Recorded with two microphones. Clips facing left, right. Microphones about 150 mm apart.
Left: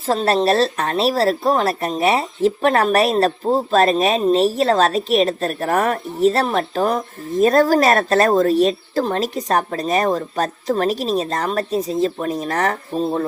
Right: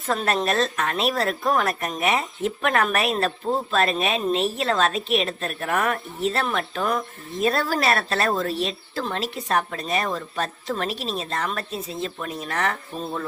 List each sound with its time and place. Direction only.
0.0 s speech: 30° left (ahead or behind)